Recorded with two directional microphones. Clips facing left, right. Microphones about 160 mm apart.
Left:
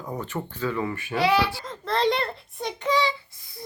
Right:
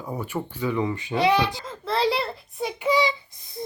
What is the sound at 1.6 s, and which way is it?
A child's voice, centre (ahead or behind).